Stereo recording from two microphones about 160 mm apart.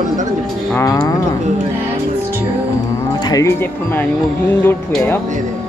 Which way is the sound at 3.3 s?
15° left (ahead or behind).